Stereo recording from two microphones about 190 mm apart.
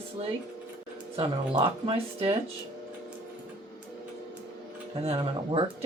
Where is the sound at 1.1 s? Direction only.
30° right (ahead or behind).